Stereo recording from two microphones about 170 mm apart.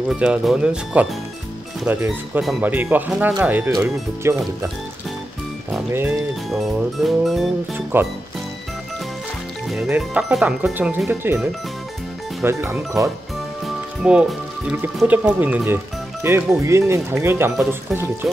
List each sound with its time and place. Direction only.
0.1 s speech: 5° right (ahead or behind)
5.9 s speech: 15° right (ahead or behind)
6.5 s speech: centre (ahead or behind)
7.7 s speech: 15° right (ahead or behind)
9.8 s speech: 10° right (ahead or behind)
12.4 s speech: 15° right (ahead or behind)
14.0 s speech: 5° right (ahead or behind)